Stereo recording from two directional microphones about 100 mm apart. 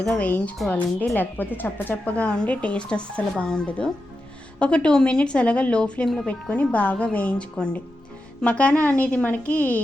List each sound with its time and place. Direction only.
0.2 s speech: 15° left (ahead or behind)